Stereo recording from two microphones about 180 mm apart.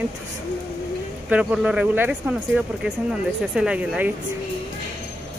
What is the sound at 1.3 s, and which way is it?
Speech, 5° right (ahead or behind).